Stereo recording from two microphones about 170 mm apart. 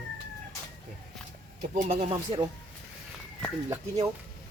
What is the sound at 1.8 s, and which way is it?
Speech, 35° right (ahead or behind).